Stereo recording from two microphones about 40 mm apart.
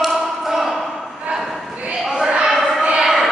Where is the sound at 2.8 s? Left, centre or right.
Right.